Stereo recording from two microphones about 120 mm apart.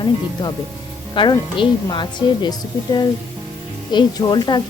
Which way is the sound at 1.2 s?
40° left (ahead or behind).